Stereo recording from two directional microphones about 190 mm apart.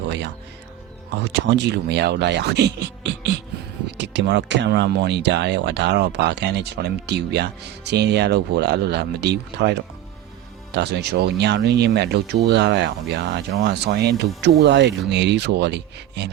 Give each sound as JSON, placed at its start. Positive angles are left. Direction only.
{"t": 1.2, "sound": "speech", "side_deg": -70}